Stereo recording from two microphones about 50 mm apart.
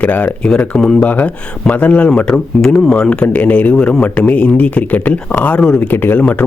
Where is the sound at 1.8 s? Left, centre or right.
Left.